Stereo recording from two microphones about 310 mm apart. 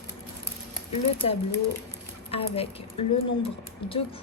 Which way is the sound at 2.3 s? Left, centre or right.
Centre.